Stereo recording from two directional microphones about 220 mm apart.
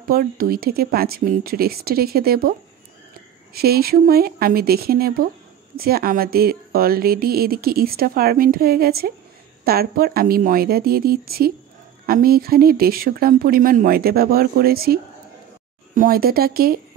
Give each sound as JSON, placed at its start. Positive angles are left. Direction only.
{"t": 0.1, "sound": "speech", "side_deg": -40}
{"t": 3.5, "sound": "speech", "side_deg": -45}